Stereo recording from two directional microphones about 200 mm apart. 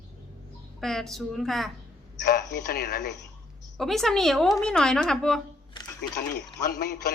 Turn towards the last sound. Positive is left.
turn(degrees=50)  # may be behind; listen again after turning